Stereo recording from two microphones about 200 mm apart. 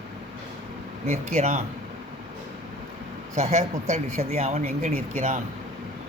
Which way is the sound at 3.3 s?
35° right (ahead or behind).